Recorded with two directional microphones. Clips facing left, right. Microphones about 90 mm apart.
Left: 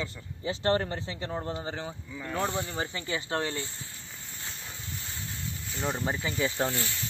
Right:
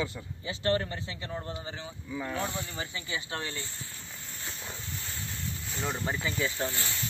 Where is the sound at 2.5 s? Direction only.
30° left (ahead or behind).